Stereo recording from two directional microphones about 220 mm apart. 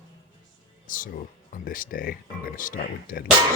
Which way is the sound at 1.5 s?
40° left (ahead or behind).